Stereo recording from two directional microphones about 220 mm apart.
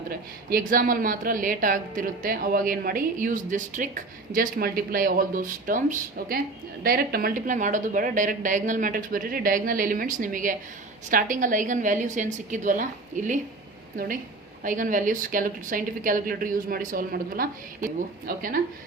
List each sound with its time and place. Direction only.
0.1 s speech: 40° right (ahead or behind)